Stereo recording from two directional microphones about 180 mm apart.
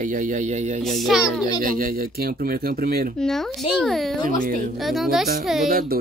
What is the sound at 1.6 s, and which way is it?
Speech, 50° right (ahead or behind).